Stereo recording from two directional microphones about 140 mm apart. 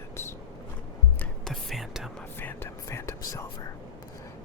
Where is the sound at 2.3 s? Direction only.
15° left (ahead or behind).